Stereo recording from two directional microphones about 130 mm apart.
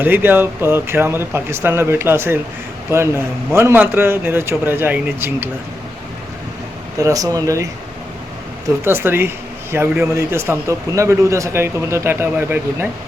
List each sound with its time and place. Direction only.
0.0 s a man's voice: 15° right (ahead or behind)
7.0 s a man's voice: 25° right (ahead or behind)
8.8 s a man's voice: 20° right (ahead or behind)